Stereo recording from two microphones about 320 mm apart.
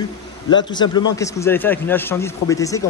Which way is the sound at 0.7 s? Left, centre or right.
Centre.